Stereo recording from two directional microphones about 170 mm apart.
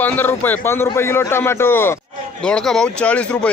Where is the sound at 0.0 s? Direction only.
10° left (ahead or behind).